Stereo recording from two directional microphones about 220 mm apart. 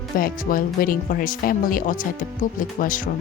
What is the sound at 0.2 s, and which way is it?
Speech, 40° left (ahead or behind).